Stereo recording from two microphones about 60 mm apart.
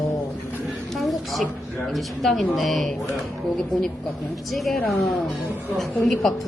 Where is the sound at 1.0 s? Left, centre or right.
Centre.